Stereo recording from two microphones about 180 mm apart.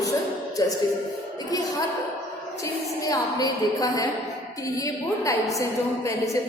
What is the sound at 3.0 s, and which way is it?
A woman's voice, 20° left (ahead or behind).